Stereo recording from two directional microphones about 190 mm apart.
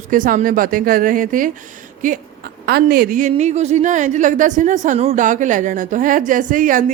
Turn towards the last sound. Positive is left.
turn(degrees=-45)  # may be behind; listen again after turning